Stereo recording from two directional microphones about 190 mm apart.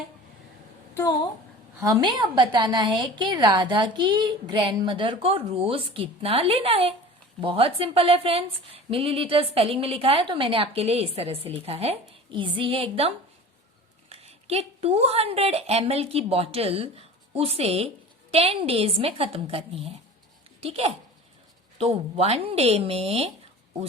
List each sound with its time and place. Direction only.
1.8 s a woman's voice: 20° right (ahead or behind)